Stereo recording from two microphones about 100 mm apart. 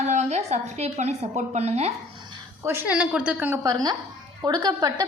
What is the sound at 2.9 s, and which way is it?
Speech, 10° right (ahead or behind).